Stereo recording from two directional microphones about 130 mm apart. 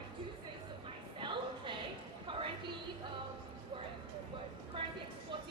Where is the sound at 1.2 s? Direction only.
40° right (ahead or behind).